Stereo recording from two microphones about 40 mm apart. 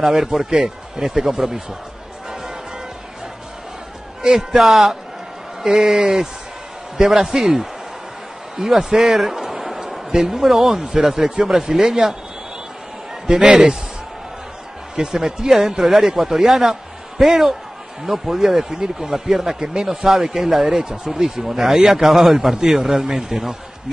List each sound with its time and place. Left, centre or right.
0.0 s speech: centre
4.2 s a man's voice: centre
9.0 s a man's voice: centre
13.3 s a man's voice: right
15.0 s speech: centre